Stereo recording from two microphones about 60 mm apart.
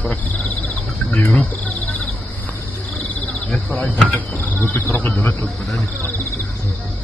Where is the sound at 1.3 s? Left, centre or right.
Left.